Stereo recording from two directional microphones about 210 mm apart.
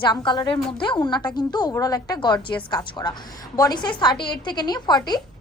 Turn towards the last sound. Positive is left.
turn(degrees=20)  # may be behind; listen again after turning